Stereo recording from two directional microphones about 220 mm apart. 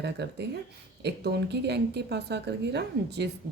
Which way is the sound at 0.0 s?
50° right (ahead or behind).